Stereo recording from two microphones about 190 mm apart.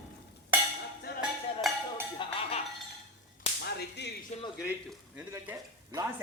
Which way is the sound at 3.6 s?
60° left (ahead or behind).